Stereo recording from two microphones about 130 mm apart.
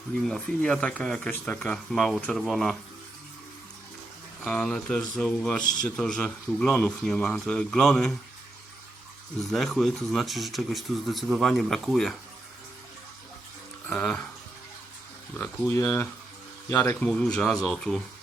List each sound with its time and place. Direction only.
0.2 s speech: 5° left (ahead or behind)
4.4 s speech: 10° left (ahead or behind)
9.4 s speech: centre (ahead or behind)
13.8 s speech: 10° left (ahead or behind)
15.4 s speech: 20° left (ahead or behind); by 18.0 s centre (ahead or behind)